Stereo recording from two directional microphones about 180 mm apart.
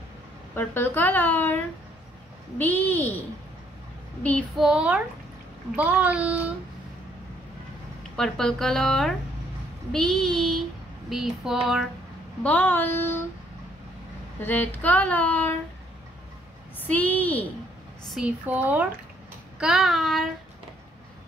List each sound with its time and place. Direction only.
0.6 s child singing: 10° left (ahead or behind)
2.6 s child singing: 10° left (ahead or behind)
4.6 s speech: 5° right (ahead or behind)
8.2 s a woman's voice: 5° left (ahead or behind)
12.4 s child singing: 10° left (ahead or behind)
14.4 s child singing: 10° left (ahead or behind)
16.8 s child singing: 10° left (ahead or behind)
18.1 s a woman's voice: 10° right (ahead or behind)